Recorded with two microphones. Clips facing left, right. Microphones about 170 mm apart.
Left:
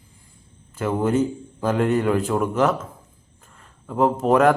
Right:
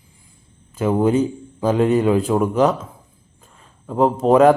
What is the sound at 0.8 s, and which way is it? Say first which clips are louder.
A man's voice: right 4 dB; 15° right (ahead or behind).